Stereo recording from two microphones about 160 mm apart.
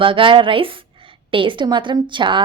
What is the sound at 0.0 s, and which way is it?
A woman's voice, 30° right (ahead or behind).